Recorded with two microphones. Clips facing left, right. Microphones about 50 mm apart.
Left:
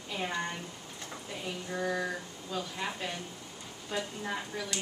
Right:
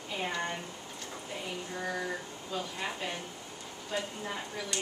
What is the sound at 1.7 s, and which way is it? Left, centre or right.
A woman's voice, centre.